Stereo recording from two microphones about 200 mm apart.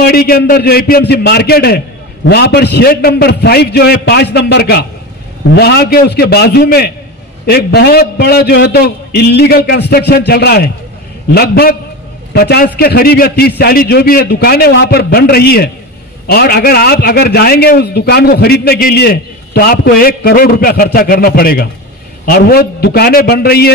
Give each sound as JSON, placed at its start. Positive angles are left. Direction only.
{"t": 0.0, "sound": "a man's voice", "side_deg": 50}